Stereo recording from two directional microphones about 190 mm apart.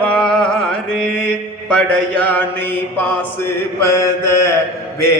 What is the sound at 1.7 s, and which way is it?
Mantra, 10° left (ahead or behind).